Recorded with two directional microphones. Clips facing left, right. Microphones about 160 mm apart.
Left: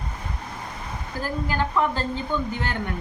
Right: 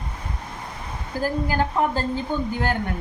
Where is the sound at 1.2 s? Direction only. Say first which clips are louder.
Right 3 dB; 45° right (ahead or behind).